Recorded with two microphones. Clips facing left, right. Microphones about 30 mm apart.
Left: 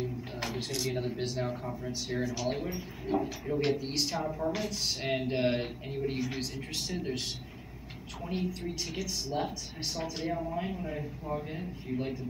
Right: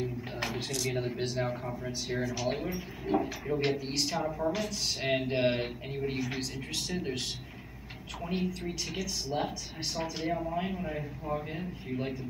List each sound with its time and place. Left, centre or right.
0.0 s a sound: centre
0.7 s speech: centre
0.9 s a man's voice: centre
3.7 s a man's voice: centre
4.5 s a man's voice: centre
5.2 s a man's voice: centre
8.3 s a man's voice: centre